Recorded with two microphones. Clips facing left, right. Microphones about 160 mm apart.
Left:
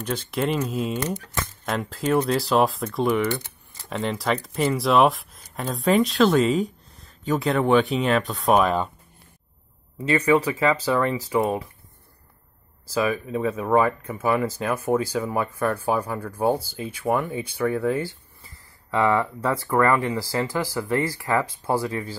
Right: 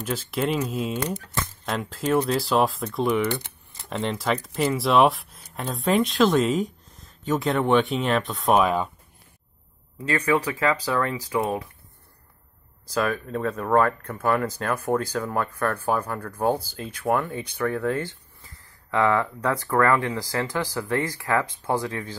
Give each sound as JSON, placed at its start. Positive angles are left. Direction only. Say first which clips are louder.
{"t": 0.0, "sound": "speech", "louder": "left 1 dB", "side_deg": -5}
{"t": 9.9, "sound": "speech", "louder": "left 3 dB", "side_deg": 10}
{"t": 12.9, "sound": "speech", "louder": "left 2 dB", "side_deg": 5}